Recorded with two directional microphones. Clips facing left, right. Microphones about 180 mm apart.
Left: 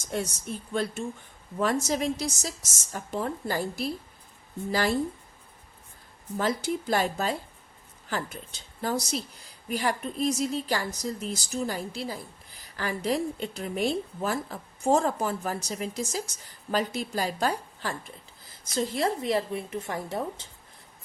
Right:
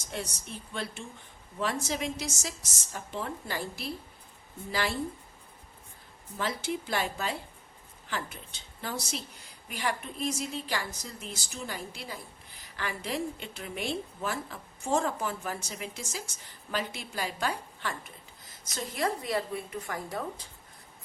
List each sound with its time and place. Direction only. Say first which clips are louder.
0.1 s a woman's voice: left 7 dB; 45° left (ahead or behind)
6.3 s a woman's voice: left 5 dB; 45° left (ahead or behind); by 20.5 s 25° left (ahead or behind)